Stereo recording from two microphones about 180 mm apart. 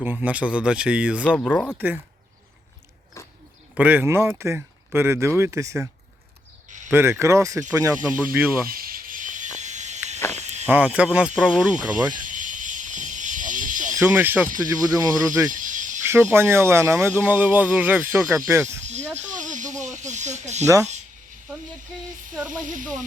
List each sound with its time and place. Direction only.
0.0 s speech: 10° right (ahead or behind)
1.4 s speech: 10° left (ahead or behind)
3.2 s wild animals: 15° left (ahead or behind)
3.8 s speech: 10° right (ahead or behind)
6.9 s speech: 15° right (ahead or behind)
8.7 s a sound: 55° right (ahead or behind)
10.3 s cricket: 40° right (ahead or behind)
10.7 s speech: 5° right (ahead or behind)
12.2 s snake: 45° right (ahead or behind)
13.9 s speech: 10° right (ahead or behind)
15.5 s snake: 45° right (ahead or behind)
16.0 s speech: 15° right (ahead or behind)
18.9 s speech: 40° right (ahead or behind)
22.4 s speech: 45° right (ahead or behind)